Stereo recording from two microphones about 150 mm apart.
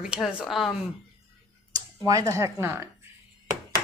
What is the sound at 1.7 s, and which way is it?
Speech, 20° right (ahead or behind).